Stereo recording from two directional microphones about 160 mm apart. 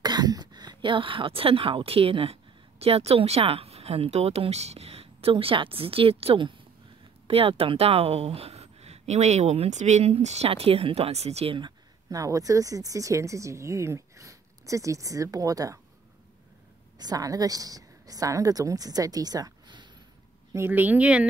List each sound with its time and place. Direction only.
0.0 s speech: 25° right (ahead or behind)
17.0 s a woman's voice: 25° right (ahead or behind)
20.5 s speech: 15° right (ahead or behind)